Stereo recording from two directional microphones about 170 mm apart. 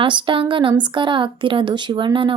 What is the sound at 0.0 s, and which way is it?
Speech, 30° right (ahead or behind).